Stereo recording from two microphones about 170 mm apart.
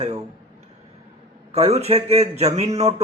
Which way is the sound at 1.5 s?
35° right (ahead or behind).